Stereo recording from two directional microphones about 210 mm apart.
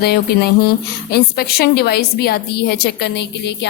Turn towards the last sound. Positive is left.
turn(degrees=55)  # may be behind; listen again after turning